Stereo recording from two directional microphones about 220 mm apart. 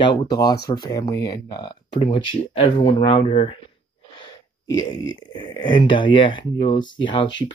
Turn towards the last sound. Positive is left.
turn(degrees=20)  # may be behind; listen again after turning